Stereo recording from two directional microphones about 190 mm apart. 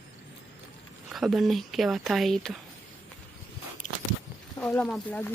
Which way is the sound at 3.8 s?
40° left (ahead or behind).